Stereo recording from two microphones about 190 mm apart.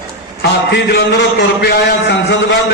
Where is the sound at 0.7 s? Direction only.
60° left (ahead or behind).